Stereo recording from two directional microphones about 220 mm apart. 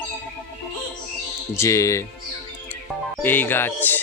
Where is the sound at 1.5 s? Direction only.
15° left (ahead or behind).